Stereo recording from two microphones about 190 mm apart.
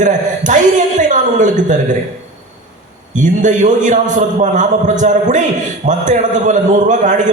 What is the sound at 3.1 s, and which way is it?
A man's voice, 40° right (ahead or behind).